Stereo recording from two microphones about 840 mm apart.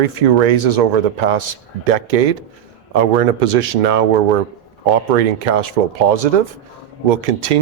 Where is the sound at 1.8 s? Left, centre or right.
Right.